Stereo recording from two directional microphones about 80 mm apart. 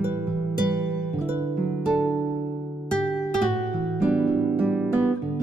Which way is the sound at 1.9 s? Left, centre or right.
Centre.